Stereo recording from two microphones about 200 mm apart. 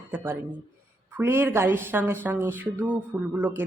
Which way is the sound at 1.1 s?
10° right (ahead or behind).